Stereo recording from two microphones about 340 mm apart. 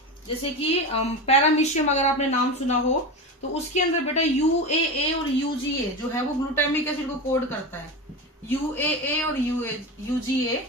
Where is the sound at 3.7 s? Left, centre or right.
Centre.